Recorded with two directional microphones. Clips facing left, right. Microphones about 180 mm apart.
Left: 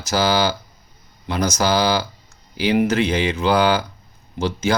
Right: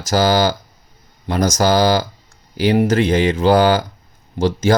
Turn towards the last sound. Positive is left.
turn(degrees=-45)  # may be behind; listen again after turning